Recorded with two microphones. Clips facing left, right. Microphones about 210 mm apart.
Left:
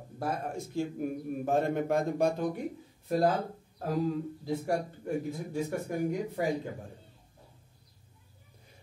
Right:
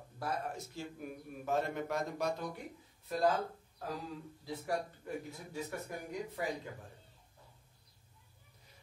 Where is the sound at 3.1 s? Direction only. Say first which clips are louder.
Left 5 dB; 40° left (ahead or behind).